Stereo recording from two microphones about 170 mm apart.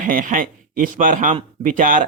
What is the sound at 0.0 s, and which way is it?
A man's voice, 55° right (ahead or behind).